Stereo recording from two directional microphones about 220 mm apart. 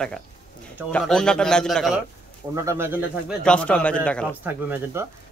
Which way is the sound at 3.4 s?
5° left (ahead or behind).